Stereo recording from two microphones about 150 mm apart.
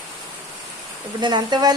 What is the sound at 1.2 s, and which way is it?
Speech, 30° right (ahead or behind).